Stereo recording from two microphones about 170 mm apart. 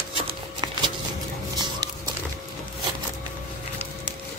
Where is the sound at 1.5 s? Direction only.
25° right (ahead or behind).